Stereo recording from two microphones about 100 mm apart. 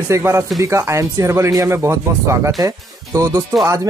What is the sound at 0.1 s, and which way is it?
Speech, 30° right (ahead or behind).